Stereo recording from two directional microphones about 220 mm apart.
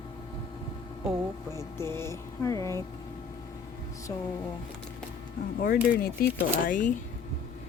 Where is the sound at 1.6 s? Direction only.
10° left (ahead or behind).